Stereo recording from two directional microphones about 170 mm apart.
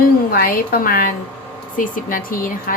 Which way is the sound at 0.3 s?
60° left (ahead or behind).